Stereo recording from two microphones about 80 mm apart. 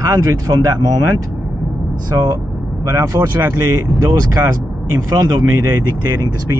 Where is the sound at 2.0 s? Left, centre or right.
Right.